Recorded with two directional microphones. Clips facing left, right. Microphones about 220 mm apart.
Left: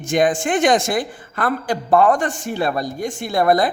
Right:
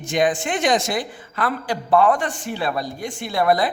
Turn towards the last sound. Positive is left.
turn(degrees=45)  # may be behind; listen again after turning